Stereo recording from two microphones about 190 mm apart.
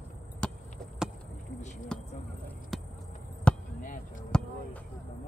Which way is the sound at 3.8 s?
45° left (ahead or behind).